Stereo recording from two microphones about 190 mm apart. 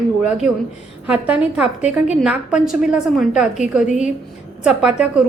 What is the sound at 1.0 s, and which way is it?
A woman's voice, 5° right (ahead or behind).